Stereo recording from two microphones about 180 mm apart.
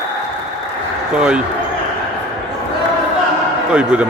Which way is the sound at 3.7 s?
5° right (ahead or behind).